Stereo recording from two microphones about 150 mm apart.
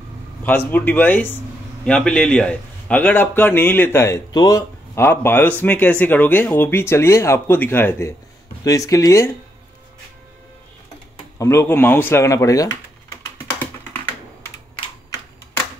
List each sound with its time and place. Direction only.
0.4 s speech: 10° left (ahead or behind)
11.3 s speech: 15° left (ahead or behind)
13.2 s typing: 15° left (ahead or behind)